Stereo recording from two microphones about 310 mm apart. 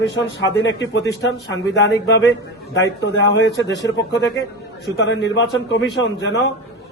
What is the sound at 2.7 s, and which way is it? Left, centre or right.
A man's voice, left.